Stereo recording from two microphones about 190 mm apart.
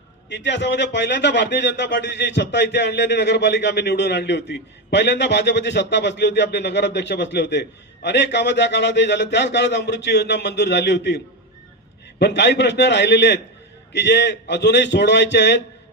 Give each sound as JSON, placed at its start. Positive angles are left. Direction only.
{"t": 0.3, "sound": "speech", "side_deg": 65}
{"t": 12.2, "sound": "speech", "side_deg": 65}